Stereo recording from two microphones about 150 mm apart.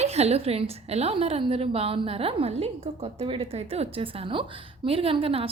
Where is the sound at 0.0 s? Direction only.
45° right (ahead or behind).